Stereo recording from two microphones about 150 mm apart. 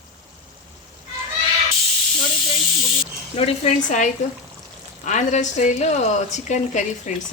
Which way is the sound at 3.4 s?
50° left (ahead or behind).